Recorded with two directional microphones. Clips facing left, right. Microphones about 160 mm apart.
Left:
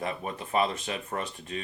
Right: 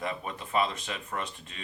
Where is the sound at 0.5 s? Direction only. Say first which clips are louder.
Left 2 dB; 40° left (ahead or behind).